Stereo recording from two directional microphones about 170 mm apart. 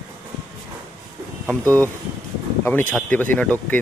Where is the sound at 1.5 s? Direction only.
10° left (ahead or behind).